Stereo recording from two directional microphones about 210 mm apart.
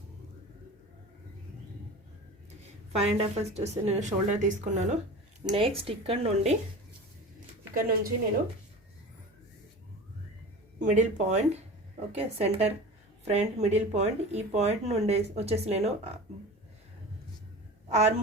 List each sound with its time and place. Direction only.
2.9 s speech: 30° right (ahead or behind)
7.7 s a woman's voice: 40° right (ahead or behind)
10.8 s speech: 35° right (ahead or behind)
17.8 s a woman's voice: 30° right (ahead or behind)